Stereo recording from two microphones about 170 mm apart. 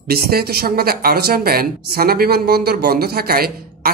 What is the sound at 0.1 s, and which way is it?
Speech, 65° right (ahead or behind).